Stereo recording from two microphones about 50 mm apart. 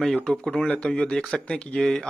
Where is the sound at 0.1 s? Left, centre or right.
Centre.